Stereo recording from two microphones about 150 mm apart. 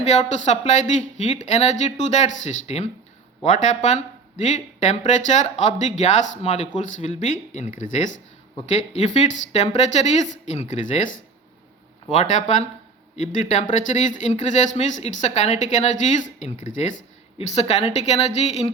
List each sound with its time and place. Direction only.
0.0 s speech: 50° left (ahead or behind)
12.1 s speech: 50° left (ahead or behind)